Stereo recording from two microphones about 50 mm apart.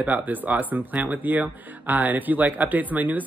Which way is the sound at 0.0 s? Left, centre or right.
Right.